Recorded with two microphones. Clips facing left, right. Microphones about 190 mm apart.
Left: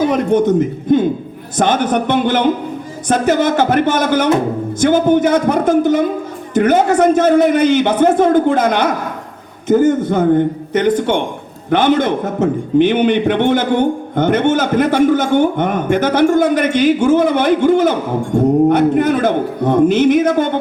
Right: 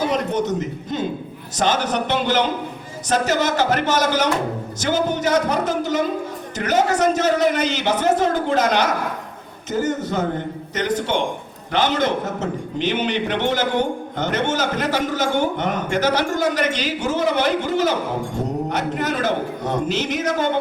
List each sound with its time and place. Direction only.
0.0 s a man's voice: 55° left (ahead or behind)